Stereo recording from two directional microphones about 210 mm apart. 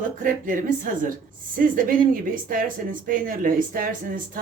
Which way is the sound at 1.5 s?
40° right (ahead or behind).